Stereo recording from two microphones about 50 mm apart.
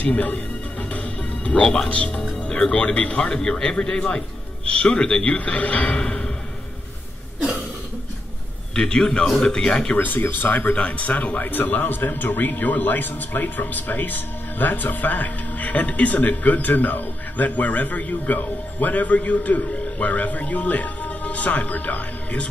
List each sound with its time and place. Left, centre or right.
0.0 s music: left
1.9 s speech: left
2.4 s a man's voice: centre
8.7 s a man's voice: centre
9.9 s a man's voice: left
10.7 s a man's voice: left